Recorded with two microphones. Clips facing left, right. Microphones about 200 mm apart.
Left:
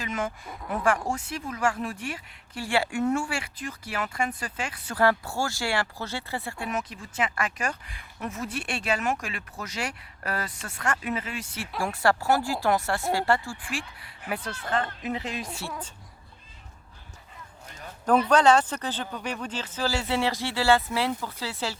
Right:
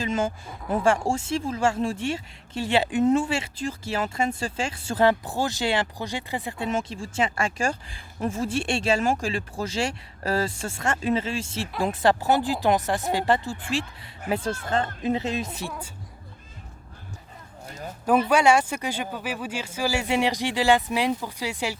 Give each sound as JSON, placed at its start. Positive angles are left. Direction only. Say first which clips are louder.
{"t": 0.0, "sound": "speech", "louder": "right 5 dB", "side_deg": -30}
{"t": 17.7, "sound": "a sound", "louder": "right 7 dB", "side_deg": -40}
{"t": 18.3, "sound": "speech", "louder": "left 1 dB", "side_deg": -10}